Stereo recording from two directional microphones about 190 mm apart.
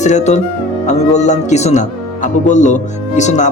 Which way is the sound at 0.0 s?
35° left (ahead or behind).